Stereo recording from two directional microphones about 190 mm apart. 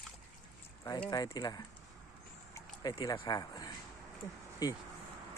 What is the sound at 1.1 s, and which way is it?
Speech, 20° left (ahead or behind).